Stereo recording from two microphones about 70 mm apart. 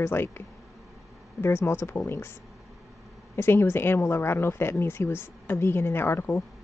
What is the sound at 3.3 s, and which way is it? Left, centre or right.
A woman's voice, left.